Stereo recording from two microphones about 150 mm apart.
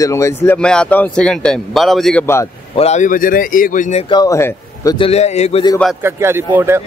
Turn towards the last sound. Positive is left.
turn(degrees=-15)  # may be behind; listen again after turning